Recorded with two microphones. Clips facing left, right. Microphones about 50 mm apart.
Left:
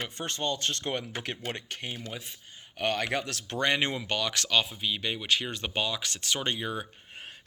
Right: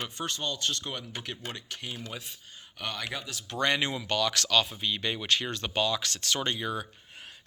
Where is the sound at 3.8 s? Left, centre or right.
Left; by 5.5 s centre.